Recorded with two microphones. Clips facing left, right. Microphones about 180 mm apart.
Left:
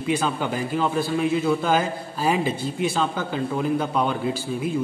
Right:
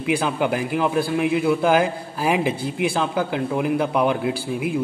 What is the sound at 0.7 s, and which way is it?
A man's voice, 15° right (ahead or behind).